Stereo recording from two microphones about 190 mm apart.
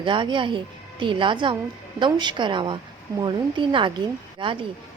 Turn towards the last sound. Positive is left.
turn(degrees=-25)  # may be behind; listen again after turning